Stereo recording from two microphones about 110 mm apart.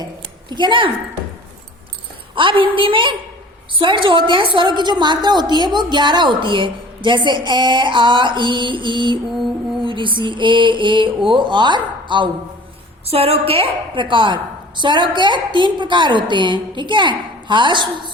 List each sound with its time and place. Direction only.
0.5 s a woman's voice: 45° right (ahead or behind)
2.3 s a woman's voice: 50° right (ahead or behind)
13.1 s a woman's voice: 65° right (ahead or behind); by 17.8 s 45° right (ahead or behind)